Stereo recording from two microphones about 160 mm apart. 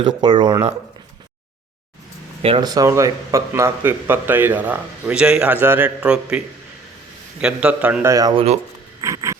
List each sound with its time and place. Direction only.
0.0 s speech: 30° right (ahead or behind)
2.4 s speech: 30° right (ahead or behind); by 6.4 s 5° right (ahead or behind)
7.4 s speech: 5° right (ahead or behind)
8.1 s speech: 30° right (ahead or behind)
9.0 s a sound: 20° right (ahead or behind)